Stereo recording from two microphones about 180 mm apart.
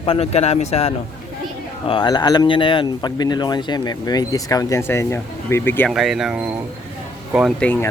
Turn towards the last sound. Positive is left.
turn(degrees=10)  # may be behind; listen again after turning